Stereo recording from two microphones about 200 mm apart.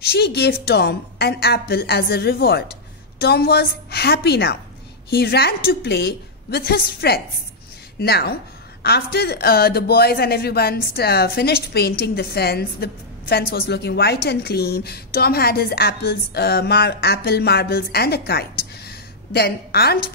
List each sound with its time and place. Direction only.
0.0 s a woman's voice: 50° left (ahead or behind)